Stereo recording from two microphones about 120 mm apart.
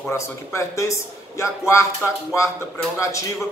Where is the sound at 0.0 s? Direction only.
25° left (ahead or behind).